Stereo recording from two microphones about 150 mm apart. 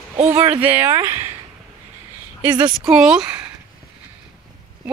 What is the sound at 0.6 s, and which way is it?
Speech, 10° right (ahead or behind).